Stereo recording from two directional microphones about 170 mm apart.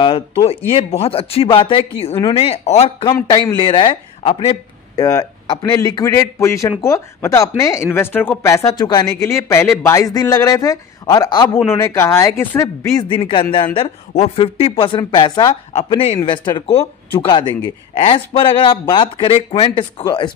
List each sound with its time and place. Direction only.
0.7 s a woman's voice: 35° left (ahead or behind)
4.9 s speech: 20° left (ahead or behind)
13.1 s a woman's voice: 30° left (ahead or behind)